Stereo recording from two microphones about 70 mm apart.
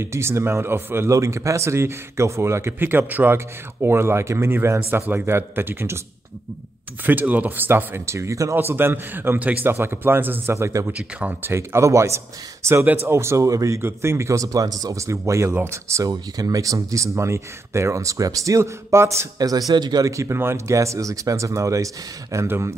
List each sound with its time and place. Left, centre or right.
0.0 s speech: right
1.1 s speech: right
7.1 s speech: right
8.5 s speech: right
10.5 s speech: right
12.8 s speech: right
13.7 s speech: right
16.1 s speech: right
19.3 s a man's voice: right
19.7 s speech: right
20.1 s speech: right